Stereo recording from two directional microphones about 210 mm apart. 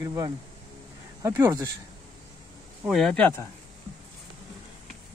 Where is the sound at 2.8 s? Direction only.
Centre (ahead or behind).